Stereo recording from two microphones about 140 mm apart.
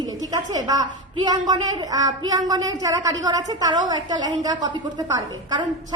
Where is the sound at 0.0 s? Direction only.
30° right (ahead or behind).